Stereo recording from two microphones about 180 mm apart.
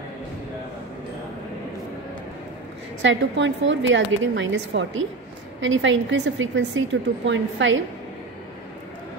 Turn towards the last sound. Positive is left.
turn(degrees=-90)